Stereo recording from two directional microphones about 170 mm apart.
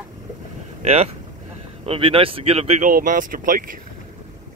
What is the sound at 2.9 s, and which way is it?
Speech, 55° right (ahead or behind).